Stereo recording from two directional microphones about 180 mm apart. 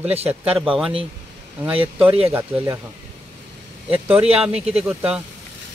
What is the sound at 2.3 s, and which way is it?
Speech, 15° right (ahead or behind).